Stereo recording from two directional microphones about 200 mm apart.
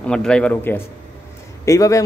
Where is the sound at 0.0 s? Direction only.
5° left (ahead or behind).